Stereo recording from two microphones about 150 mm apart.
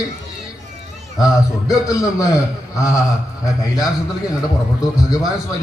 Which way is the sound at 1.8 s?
20° left (ahead or behind).